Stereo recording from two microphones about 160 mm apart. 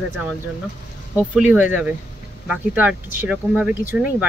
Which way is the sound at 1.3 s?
5° right (ahead or behind).